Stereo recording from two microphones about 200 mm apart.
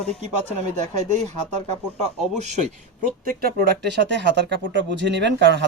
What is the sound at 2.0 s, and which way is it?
Speech, 35° right (ahead or behind).